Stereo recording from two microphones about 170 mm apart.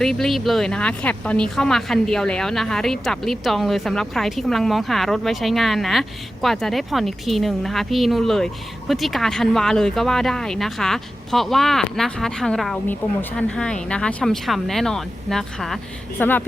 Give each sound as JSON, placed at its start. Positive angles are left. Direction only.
{"t": 0.0, "sound": "speech", "side_deg": 0}